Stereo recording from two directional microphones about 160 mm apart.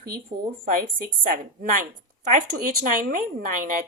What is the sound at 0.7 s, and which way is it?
A woman's voice, 60° right (ahead or behind).